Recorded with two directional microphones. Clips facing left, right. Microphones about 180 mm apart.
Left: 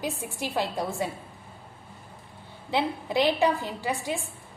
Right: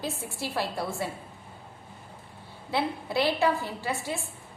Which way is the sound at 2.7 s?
15° left (ahead or behind).